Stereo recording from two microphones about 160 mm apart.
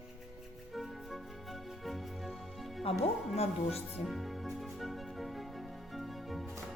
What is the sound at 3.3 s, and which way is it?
Speech, 40° left (ahead or behind).